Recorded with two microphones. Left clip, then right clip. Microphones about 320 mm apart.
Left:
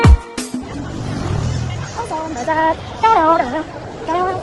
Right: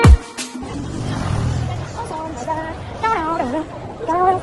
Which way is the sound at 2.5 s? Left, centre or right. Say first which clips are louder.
Left 8 dB; left.